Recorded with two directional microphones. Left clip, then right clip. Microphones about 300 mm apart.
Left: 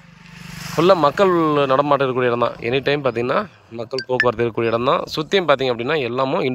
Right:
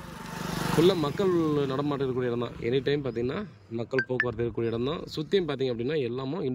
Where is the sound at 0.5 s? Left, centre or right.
Centre.